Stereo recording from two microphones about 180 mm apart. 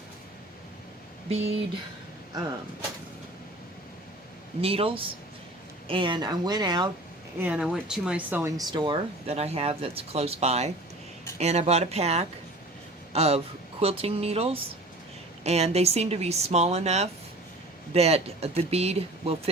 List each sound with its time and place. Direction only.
4.6 s speech: 30° right (ahead or behind)
7.3 s speech: 5° right (ahead or behind); by 19.4 s 35° right (ahead or behind)